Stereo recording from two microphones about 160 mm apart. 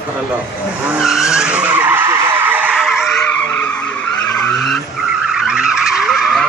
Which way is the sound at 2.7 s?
Centre (ahead or behind).